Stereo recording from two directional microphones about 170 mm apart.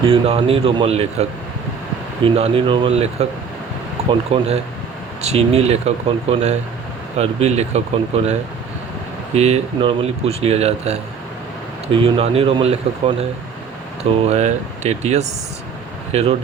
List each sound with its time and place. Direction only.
0.0 s speech: 35° right (ahead or behind)
7.2 s speech: 40° right (ahead or behind)
11.9 s speech: 35° right (ahead or behind)